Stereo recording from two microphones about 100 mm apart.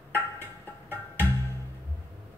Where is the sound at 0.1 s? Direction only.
20° left (ahead or behind).